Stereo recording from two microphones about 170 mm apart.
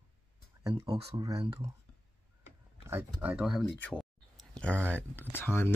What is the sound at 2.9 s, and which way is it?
Speech, 15° right (ahead or behind).